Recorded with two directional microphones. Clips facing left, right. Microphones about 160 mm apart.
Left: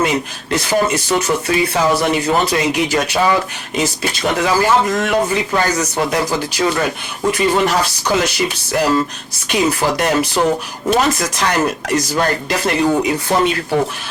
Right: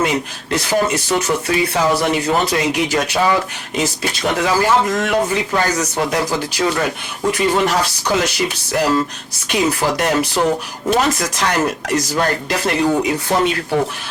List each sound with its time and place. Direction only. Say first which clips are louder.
0.0 s speech: left 1 dB; 10° left (ahead or behind)